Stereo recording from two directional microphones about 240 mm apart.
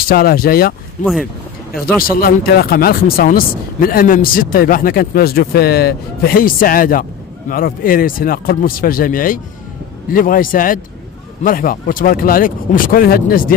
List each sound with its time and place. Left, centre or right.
0.1 s speech: left